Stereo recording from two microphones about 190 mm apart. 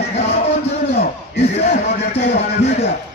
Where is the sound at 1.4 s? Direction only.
35° left (ahead or behind).